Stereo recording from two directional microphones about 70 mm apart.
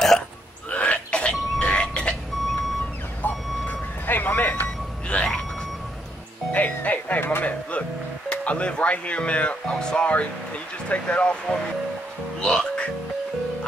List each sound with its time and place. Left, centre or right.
0.7 s burping: centre
1.6 s music: centre
3.2 s reversing beeps: left
5.0 s music: centre
6.5 s music: left
8.3 s speech: centre
12.4 s music: centre